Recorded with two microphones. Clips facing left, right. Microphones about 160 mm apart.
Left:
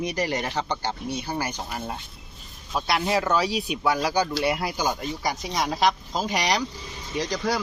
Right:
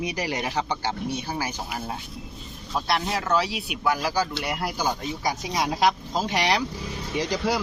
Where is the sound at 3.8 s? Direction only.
20° left (ahead or behind).